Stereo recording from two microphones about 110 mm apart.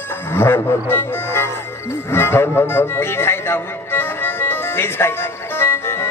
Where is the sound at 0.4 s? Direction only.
20° left (ahead or behind).